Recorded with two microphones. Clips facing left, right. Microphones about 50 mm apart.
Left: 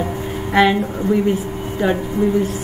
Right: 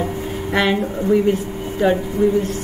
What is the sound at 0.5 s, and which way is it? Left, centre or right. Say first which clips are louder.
Speech: left 4 dB; centre.